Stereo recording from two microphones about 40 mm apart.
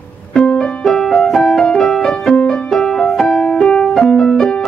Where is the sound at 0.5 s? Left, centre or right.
Centre.